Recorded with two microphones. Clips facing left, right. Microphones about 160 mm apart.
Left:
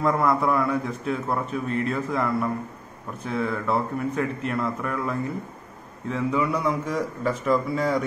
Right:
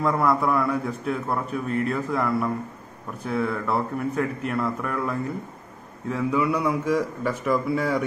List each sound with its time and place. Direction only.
0.0 s a man's voice: centre (ahead or behind)